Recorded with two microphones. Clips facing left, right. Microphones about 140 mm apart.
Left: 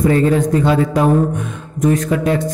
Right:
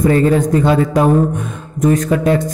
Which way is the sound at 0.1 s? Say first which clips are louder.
Right 1 dB; 45° right (ahead or behind).